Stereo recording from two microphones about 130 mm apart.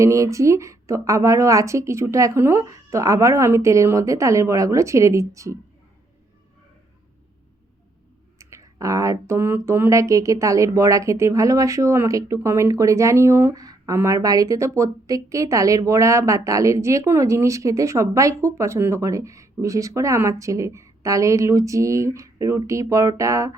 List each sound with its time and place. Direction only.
0.0 s speech: 25° right (ahead or behind)
8.4 s speech: 25° right (ahead or behind)